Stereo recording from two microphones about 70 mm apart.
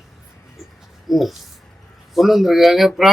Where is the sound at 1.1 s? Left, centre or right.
Centre.